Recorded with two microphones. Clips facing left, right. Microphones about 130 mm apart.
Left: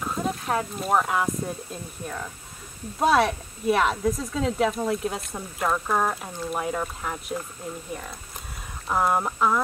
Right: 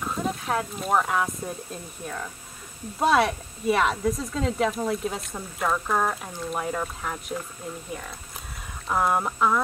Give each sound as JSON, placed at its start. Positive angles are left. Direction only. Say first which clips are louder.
{"t": 0.0, "sound": "speech", "louder": "left 1 dB", "side_deg": 0}
{"t": 8.8, "sound": "speech", "louder": "even", "side_deg": 0}